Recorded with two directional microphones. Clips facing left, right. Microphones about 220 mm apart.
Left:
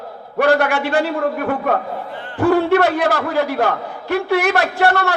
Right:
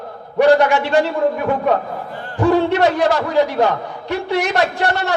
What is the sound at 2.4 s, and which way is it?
A man's voice, 55° left (ahead or behind).